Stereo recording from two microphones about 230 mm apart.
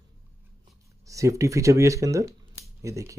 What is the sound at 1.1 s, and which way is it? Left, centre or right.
Speech, centre.